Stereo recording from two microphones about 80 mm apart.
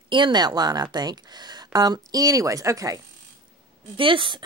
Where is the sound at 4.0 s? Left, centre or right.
Right.